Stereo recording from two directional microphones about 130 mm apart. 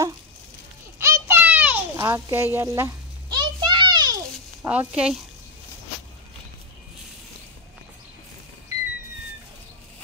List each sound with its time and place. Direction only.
0.9 s children playing: 20° right (ahead or behind)
2.0 s a child's voice: 25° right (ahead or behind)
3.3 s a sound: 35° right (ahead or behind)
4.6 s speech: 10° right (ahead or behind)